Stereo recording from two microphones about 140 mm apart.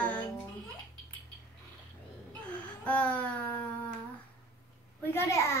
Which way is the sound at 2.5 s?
10° left (ahead or behind).